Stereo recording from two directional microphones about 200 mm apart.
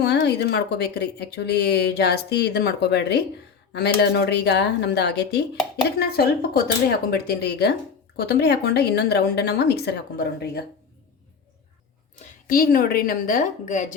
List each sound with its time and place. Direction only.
0.0 s a woman's voice: 55° left (ahead or behind)
12.2 s a woman's voice: 45° left (ahead or behind)